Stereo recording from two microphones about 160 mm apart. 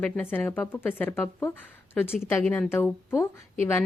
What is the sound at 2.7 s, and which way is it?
Speech, 15° left (ahead or behind).